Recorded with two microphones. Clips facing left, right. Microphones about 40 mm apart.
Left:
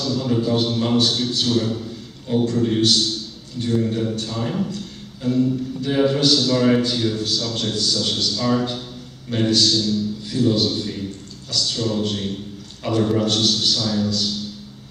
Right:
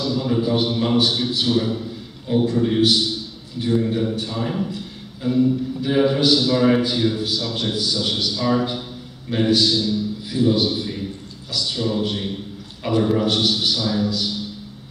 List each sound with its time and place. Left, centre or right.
0.0 s a man's voice: centre